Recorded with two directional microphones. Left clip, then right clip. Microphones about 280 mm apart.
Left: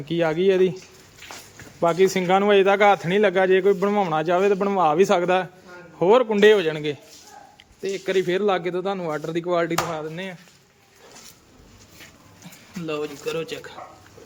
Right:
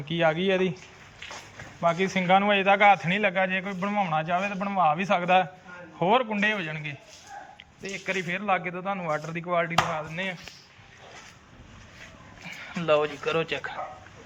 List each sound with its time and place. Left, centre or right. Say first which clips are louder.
0.0 s speech: left 4 dB; centre
1.8 s a man's voice: left 6 dB; left
12.8 s speech: right 4 dB; centre